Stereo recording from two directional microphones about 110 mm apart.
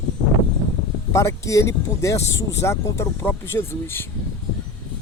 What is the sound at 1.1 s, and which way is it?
Speech, 30° left (ahead or behind).